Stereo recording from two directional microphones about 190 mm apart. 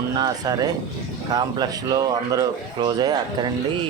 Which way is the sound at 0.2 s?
20° right (ahead or behind).